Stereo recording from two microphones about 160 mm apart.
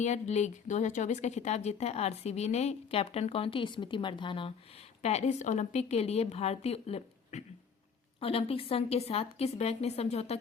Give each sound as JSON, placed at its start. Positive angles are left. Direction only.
{"t": 0.0, "sound": "speech", "side_deg": 45}
{"t": 5.0, "sound": "a woman's voice", "side_deg": 45}